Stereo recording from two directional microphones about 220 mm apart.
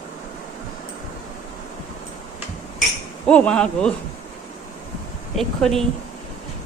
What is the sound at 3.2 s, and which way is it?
Speech, 5° left (ahead or behind).